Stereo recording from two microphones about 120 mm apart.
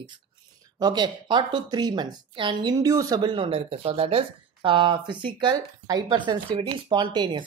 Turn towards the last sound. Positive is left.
turn(degrees=-40)  # may be behind; listen again after turning